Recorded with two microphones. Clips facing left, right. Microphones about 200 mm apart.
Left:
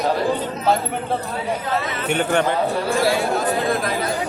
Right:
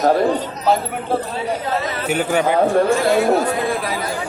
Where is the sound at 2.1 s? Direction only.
5° right (ahead or behind).